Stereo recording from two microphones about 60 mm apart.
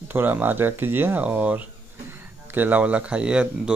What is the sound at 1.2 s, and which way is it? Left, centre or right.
Speech, right.